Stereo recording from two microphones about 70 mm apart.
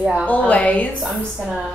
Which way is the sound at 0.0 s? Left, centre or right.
Centre.